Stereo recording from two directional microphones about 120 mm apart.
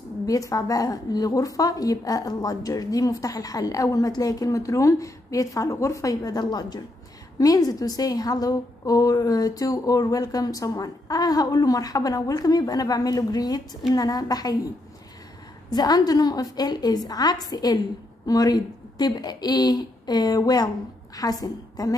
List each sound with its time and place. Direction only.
0.3 s a woman's voice: 30° left (ahead or behind)
15.7 s a woman's voice: 35° left (ahead or behind)